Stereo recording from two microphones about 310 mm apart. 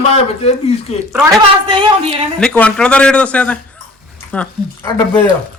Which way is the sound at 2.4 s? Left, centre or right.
Centre.